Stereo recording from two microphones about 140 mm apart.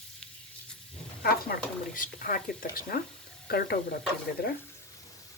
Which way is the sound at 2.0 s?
80° left.